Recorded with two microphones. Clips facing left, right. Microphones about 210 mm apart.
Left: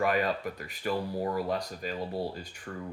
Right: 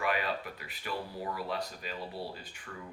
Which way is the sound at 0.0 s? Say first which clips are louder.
Left 5 dB; 45° left (ahead or behind).